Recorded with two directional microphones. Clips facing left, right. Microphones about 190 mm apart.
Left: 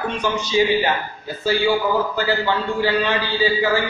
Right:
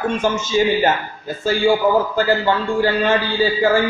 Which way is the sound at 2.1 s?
50° right (ahead or behind).